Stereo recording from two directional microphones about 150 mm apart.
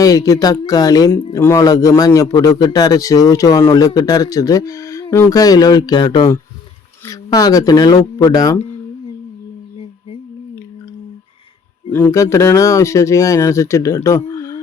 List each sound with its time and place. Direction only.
0.0 s speech: 25° left (ahead or behind)
11.9 s speech: 15° left (ahead or behind)
14.3 s a sound: 20° left (ahead or behind)